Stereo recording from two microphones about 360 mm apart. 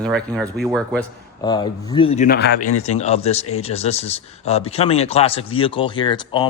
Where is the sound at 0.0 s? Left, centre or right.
Centre.